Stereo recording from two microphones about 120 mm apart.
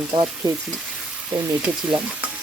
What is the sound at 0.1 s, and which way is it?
Frying, 35° right (ahead or behind).